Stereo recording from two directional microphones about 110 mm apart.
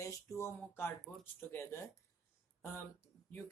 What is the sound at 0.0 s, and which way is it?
Speech, 30° left (ahead or behind).